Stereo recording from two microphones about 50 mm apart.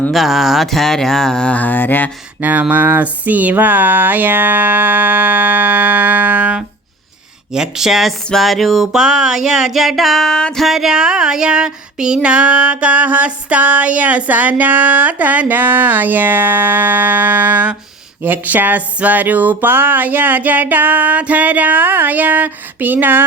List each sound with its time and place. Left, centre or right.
0.1 s speech: centre
1.5 s mantra: left
2.4 s a sound: right
7.5 s speech: centre
8.9 s speech: centre
10.6 s speech: centre
10.9 s a sound: centre; by 23.2 s right